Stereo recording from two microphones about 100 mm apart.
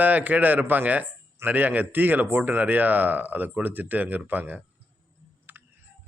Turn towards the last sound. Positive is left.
turn(degrees=-20)  # may be behind; listen again after turning